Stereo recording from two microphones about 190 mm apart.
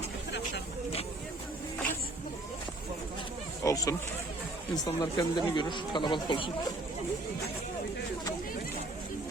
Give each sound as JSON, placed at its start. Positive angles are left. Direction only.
{"t": 3.6, "sound": "speech", "side_deg": 15}